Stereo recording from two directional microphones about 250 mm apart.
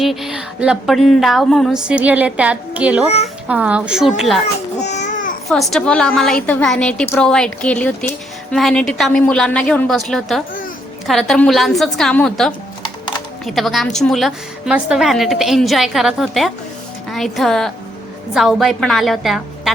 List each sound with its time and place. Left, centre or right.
0.0 s speech: centre
4.9 s babbling: left
5.5 s speech: centre